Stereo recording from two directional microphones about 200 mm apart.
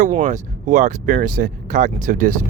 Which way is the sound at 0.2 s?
40° right (ahead or behind).